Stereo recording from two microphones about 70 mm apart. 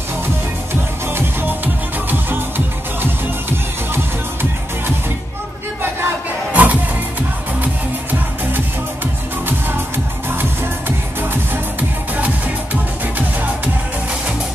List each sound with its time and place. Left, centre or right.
1.0 s music: right
6.5 s music: right